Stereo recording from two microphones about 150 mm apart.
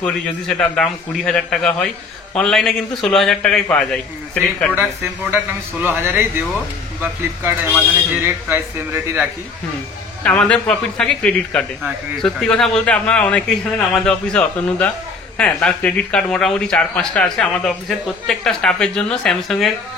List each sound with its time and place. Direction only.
0.0 s speech: 5° left (ahead or behind)
5.8 s speech: 15° right (ahead or behind)
8.2 s speech: 15° right (ahead or behind)
10.2 s a man's voice: 10° left (ahead or behind)